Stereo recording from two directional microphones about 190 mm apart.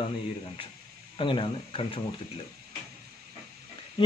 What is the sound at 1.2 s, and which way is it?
Speech, 25° left (ahead or behind).